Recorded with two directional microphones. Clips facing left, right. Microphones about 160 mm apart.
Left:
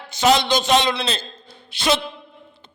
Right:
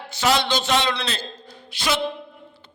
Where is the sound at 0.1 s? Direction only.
20° left (ahead or behind).